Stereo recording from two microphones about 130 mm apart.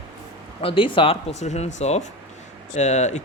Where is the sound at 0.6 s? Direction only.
45° left (ahead or behind).